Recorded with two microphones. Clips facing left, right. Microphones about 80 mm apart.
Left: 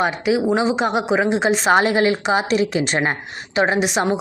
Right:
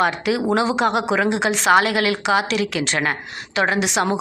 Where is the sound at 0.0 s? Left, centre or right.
Centre.